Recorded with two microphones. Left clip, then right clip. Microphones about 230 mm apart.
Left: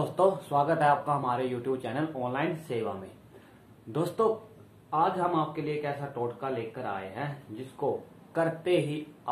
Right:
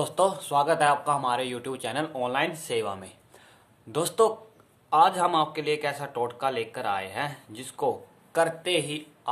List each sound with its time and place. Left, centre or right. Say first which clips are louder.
0.1 s speech: even; right
3.9 s speech: right 4 dB; right
8.3 s speech: right 3 dB; right